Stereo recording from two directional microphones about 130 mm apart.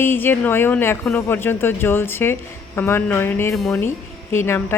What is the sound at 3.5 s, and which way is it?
Speech, centre (ahead or behind).